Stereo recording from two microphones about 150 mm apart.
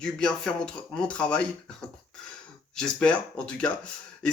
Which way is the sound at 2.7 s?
5° left (ahead or behind).